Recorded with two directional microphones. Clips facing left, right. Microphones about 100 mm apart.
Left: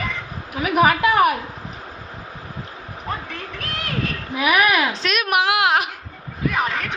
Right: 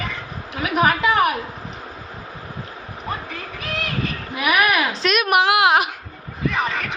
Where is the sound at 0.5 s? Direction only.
5° left (ahead or behind).